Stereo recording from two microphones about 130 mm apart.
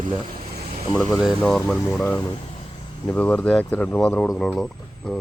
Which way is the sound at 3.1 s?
10° left (ahead or behind).